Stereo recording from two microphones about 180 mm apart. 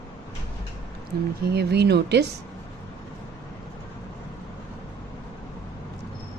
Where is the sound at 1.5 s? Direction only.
65° right (ahead or behind).